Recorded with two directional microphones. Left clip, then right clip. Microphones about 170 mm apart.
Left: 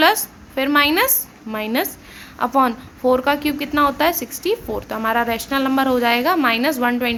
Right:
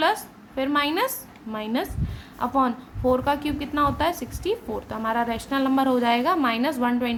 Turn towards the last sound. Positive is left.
turn(degrees=10)  # may be behind; listen again after turning